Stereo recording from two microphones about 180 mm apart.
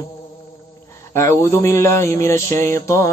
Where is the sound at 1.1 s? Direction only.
15° left (ahead or behind).